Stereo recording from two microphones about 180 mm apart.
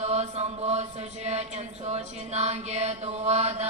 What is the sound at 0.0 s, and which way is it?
Mantra, 35° right (ahead or behind).